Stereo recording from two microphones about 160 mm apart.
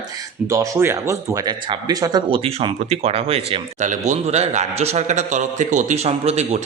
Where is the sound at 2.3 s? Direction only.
35° right (ahead or behind).